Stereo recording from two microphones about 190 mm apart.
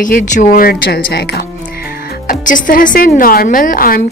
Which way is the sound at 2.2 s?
45° left (ahead or behind).